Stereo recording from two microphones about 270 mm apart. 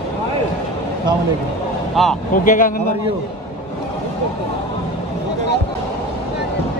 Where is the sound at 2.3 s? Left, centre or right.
Left.